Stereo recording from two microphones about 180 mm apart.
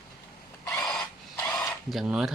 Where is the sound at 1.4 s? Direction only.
Centre (ahead or behind).